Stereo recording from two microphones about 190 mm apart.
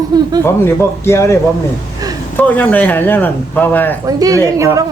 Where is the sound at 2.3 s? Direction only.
10° left (ahead or behind).